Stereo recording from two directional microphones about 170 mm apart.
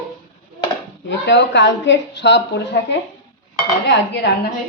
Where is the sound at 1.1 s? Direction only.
90° left.